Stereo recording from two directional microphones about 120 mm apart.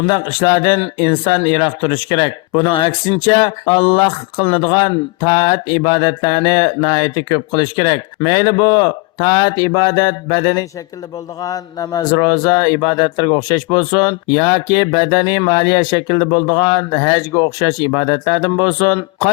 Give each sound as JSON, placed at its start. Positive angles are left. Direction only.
{"t": 0.0, "sound": "speech", "side_deg": 40}